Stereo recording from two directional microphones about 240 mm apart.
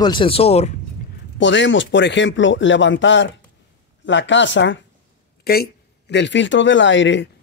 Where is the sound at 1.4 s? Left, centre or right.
Left.